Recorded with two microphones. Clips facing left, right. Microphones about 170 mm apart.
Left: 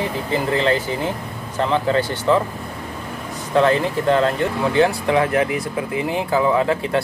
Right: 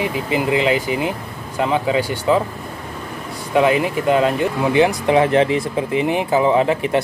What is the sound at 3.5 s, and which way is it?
Speech, 15° right (ahead or behind).